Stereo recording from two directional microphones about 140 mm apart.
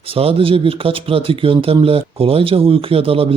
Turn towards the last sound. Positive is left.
turn(degrees=-40)  # may be behind; listen again after turning